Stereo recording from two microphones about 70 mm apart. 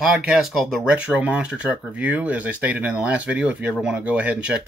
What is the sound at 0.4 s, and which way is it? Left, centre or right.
Speech, centre.